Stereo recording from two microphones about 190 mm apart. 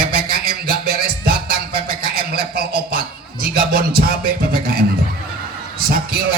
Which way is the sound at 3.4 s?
50° right (ahead or behind).